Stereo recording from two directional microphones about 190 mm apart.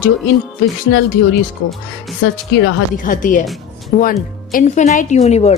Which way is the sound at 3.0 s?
45° left (ahead or behind).